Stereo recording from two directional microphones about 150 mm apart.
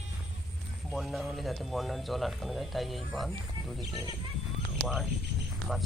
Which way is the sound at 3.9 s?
25° right (ahead or behind).